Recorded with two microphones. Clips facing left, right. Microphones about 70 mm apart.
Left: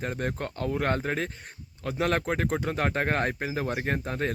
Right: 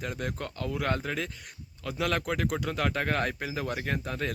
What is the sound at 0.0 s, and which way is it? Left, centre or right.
Speech, left.